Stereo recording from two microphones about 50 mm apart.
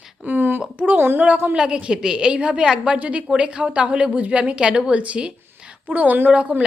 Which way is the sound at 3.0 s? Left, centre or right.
Right.